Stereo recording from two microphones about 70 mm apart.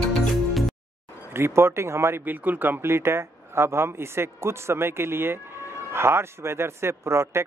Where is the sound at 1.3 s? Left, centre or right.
Right.